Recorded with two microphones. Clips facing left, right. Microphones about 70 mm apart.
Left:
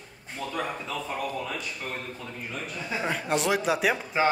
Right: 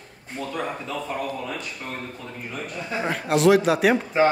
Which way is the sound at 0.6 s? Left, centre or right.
Centre.